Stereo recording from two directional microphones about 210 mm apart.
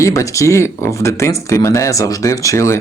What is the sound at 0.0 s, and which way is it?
Speech, 15° left (ahead or behind).